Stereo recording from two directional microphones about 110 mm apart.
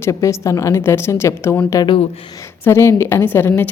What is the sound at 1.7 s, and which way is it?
Speech, 40° left (ahead or behind).